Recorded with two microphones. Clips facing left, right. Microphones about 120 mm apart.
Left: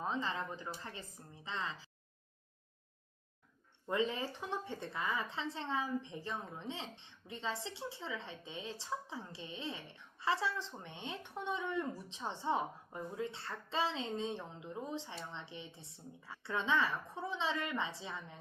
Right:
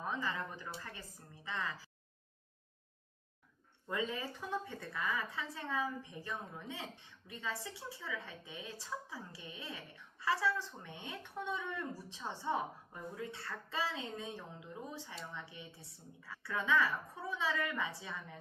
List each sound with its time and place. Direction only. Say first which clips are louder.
0.0 s a woman's voice: left 1 dB; 25° left (ahead or behind)
3.8 s a woman's voice: left 3 dB; 25° left (ahead or behind)